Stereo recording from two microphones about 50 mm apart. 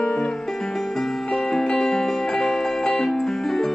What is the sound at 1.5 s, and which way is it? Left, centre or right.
Music, centre.